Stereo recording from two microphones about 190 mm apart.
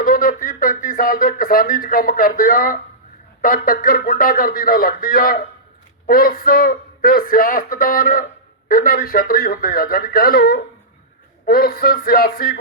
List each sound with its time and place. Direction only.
0.0 s speech: 45° left (ahead or behind)